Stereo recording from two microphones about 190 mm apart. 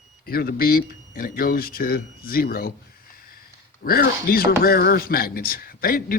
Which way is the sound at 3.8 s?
50° left (ahead or behind).